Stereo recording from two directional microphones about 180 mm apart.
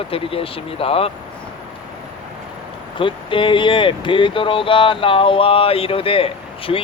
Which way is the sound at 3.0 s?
30° left (ahead or behind).